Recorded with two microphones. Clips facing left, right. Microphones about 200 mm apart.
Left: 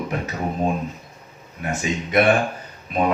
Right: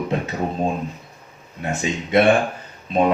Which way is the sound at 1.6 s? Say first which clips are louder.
Right 1 dB; 25° right (ahead or behind).